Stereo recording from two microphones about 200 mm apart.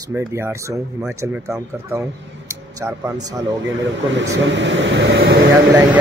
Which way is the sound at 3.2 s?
15° right (ahead or behind).